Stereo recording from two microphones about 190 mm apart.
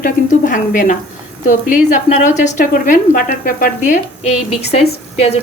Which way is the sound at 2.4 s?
45° left (ahead or behind).